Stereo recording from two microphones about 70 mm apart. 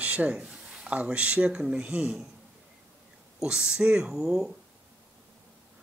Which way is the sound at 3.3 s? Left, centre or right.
Centre.